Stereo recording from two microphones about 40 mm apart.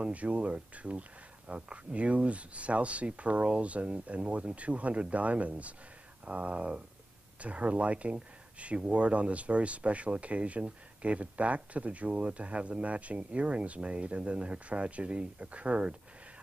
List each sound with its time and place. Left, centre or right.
0.0 s speech: right